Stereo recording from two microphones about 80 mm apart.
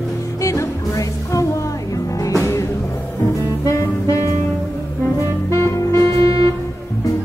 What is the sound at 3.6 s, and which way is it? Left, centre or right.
Saxophone, left.